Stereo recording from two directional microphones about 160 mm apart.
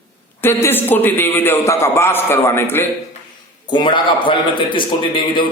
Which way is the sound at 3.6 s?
30° left (ahead or behind).